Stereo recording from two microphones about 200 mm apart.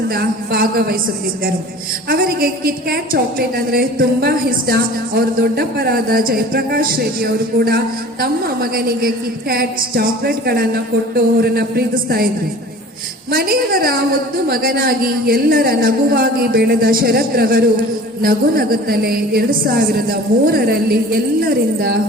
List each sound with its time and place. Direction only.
0.1 s a woman's voice: 50° right (ahead or behind)
2.0 s a woman's voice: 45° right (ahead or behind)
13.3 s a woman's voice: 50° right (ahead or behind)